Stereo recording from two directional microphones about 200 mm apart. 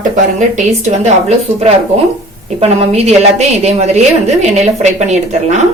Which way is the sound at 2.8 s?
30° right (ahead or behind).